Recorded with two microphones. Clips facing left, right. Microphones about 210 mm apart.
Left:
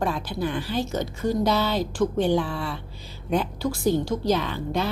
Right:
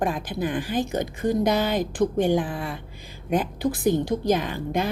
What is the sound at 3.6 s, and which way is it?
Speech, 15° right (ahead or behind).